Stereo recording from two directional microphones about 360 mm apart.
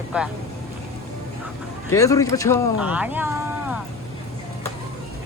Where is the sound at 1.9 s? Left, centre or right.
Centre.